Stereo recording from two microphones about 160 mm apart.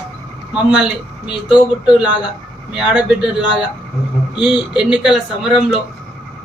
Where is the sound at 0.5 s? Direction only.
5° right (ahead or behind).